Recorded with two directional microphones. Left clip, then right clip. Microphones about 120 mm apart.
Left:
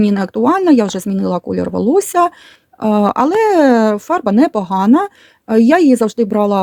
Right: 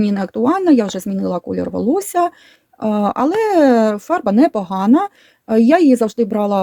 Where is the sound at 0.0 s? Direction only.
40° left (ahead or behind).